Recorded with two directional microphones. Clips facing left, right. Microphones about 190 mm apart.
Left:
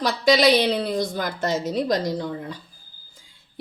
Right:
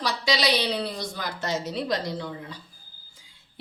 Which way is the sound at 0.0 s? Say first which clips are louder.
Left 8 dB; 50° left (ahead or behind).